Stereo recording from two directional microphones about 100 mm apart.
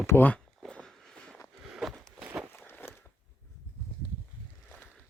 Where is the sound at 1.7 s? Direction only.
Centre (ahead or behind).